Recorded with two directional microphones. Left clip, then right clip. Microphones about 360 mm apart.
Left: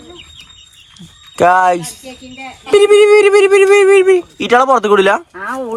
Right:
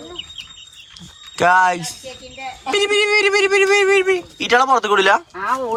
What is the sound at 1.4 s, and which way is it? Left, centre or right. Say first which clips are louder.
Speech: left 4 dB; centre.